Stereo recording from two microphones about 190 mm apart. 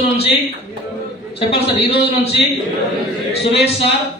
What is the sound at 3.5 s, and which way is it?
Speech, 30° left (ahead or behind).